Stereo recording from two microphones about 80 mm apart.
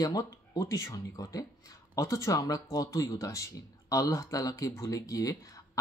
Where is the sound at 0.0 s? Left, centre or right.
Left.